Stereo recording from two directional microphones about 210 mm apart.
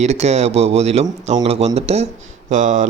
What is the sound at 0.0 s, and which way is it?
Speech, 30° right (ahead or behind).